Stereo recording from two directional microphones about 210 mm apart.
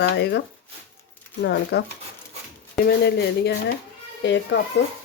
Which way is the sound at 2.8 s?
50° left (ahead or behind).